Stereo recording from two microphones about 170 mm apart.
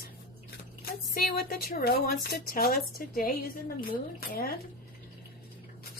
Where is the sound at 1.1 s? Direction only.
60° left (ahead or behind).